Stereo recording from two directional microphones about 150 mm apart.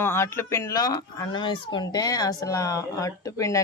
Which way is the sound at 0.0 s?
15° left (ahead or behind).